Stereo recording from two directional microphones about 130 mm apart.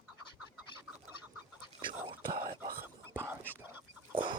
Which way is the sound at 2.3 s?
20° right (ahead or behind).